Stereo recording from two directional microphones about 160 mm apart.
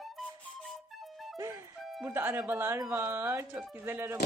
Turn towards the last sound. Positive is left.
turn(degrees=-15)  # may be behind; listen again after turning